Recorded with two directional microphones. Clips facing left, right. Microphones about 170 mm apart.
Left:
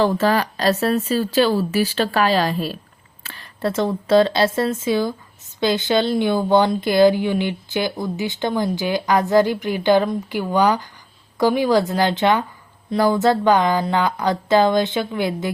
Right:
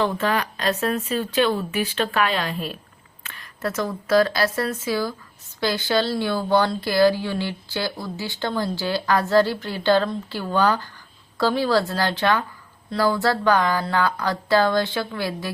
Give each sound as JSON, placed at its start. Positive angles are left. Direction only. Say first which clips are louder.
{"t": 0.0, "sound": "speech", "louder": "left 5 dB", "side_deg": 35}